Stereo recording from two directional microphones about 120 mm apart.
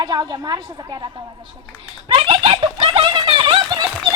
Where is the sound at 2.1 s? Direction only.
50° right (ahead or behind).